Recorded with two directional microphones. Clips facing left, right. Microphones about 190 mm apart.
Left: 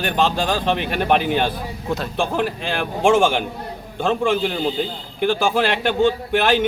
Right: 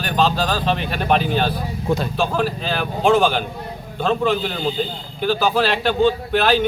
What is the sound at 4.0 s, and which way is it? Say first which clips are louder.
A man's voice: even; 10° left (ahead or behind).